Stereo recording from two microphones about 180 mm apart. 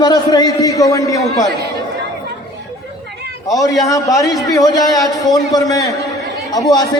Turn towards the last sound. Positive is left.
turn(degrees=20)  # may be behind; listen again after turning